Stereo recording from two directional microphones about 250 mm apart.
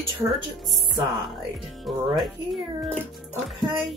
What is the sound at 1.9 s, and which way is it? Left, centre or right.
Music, centre.